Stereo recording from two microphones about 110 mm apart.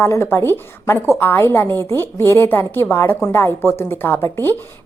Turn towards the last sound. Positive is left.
turn(degrees=20)  # may be behind; listen again after turning